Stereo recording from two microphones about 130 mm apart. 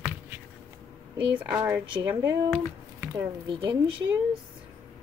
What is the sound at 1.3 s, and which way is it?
A woman's voice, 15° right (ahead or behind).